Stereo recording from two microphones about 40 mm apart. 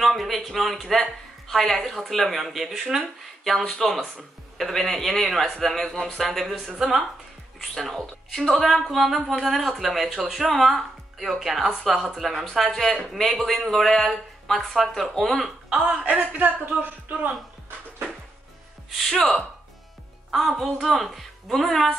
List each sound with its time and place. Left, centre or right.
0.0 s a man's voice: centre
3.6 s speech: centre
4.6 s a man's voice: centre
7.7 s a man's voice: centre
15.8 s speech: right
16.2 s speech: right
19.1 s speech: centre
20.2 s music: centre
20.7 s a man's voice: centre